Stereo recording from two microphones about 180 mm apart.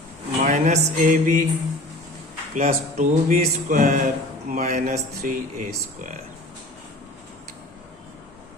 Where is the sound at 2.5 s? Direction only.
40° right (ahead or behind).